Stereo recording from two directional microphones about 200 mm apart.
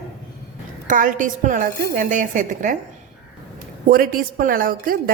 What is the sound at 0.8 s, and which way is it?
A woman's voice, 40° right (ahead or behind).